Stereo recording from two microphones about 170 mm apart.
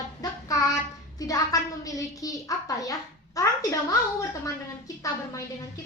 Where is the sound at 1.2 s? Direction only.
20° left (ahead or behind).